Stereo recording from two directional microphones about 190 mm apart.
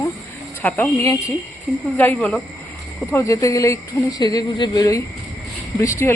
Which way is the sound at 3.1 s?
15° left (ahead or behind).